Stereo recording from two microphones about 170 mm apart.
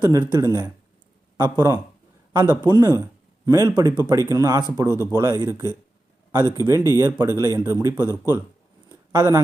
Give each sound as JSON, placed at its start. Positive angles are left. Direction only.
{"t": 0.0, "sound": "speech", "side_deg": -20}
{"t": 8.1, "sound": "speech", "side_deg": 15}
{"t": 8.9, "sound": "a sound", "side_deg": -20}